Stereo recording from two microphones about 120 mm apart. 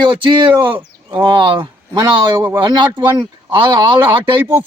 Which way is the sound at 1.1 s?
40° right (ahead or behind).